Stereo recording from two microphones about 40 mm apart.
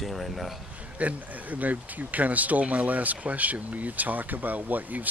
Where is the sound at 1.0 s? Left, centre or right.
Right.